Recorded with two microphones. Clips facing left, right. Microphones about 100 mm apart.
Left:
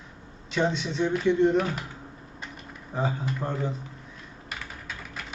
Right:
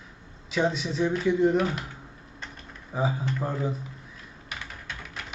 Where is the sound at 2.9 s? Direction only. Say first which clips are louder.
Right 1 dB; 5° right (ahead or behind).